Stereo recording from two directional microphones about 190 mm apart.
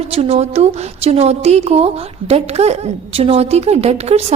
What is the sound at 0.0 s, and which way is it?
Speech, 35° right (ahead or behind).